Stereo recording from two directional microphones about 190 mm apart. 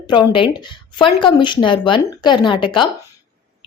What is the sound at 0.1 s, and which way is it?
Speech, 25° left (ahead or behind).